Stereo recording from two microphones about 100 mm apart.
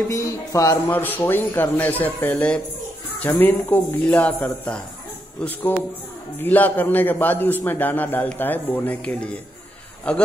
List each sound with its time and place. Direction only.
0.1 s speech: 35° left (ahead or behind)
0.9 s a man's voice: 20° left (ahead or behind)